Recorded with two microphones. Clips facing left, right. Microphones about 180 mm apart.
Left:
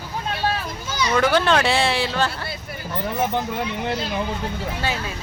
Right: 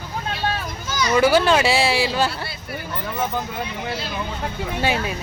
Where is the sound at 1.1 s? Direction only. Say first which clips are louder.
Right 2 dB; 5° right (ahead or behind).